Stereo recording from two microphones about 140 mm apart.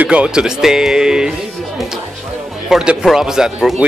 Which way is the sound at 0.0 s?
10° right (ahead or behind).